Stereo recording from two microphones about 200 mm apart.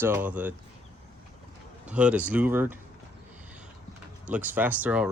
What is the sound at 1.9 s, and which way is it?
Speech, 5° right (ahead or behind).